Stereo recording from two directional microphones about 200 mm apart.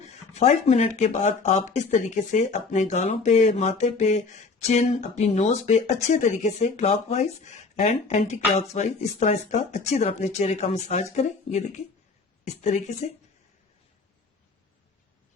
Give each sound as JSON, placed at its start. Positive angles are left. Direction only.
{"t": 0.0, "sound": "speech", "side_deg": 35}